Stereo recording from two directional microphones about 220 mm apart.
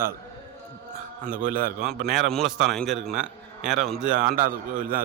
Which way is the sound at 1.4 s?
40° right (ahead or behind).